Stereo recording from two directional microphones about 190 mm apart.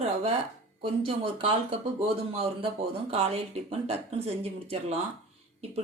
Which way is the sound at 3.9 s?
35° right (ahead or behind).